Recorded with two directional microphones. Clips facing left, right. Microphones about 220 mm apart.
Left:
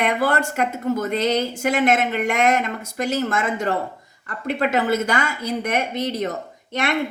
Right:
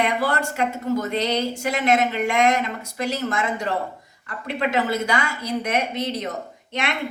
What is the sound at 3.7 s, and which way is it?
Speech, 45° left (ahead or behind).